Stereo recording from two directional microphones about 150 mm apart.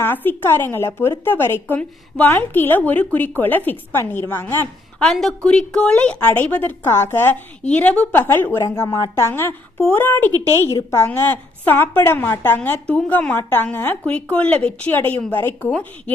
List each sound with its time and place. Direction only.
0.0 s a woman's voice: 15° left (ahead or behind)
5.0 s a woman's voice: 5° left (ahead or behind)